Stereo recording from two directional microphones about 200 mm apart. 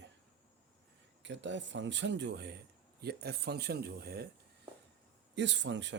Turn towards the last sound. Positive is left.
turn(degrees=-65)  # may be behind; listen again after turning